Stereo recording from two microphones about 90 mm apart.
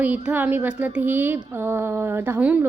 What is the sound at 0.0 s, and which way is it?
Speech, 20° right (ahead or behind).